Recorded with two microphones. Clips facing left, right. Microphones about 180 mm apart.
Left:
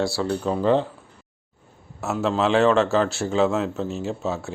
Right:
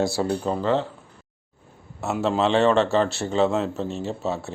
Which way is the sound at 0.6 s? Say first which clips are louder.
Left 5 dB; 15° left (ahead or behind).